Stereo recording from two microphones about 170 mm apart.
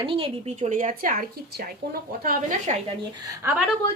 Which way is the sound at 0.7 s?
55° right (ahead or behind).